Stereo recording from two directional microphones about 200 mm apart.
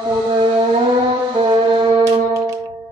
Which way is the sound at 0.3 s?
25° right (ahead or behind).